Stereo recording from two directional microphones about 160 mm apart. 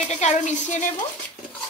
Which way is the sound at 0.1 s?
45° left (ahead or behind).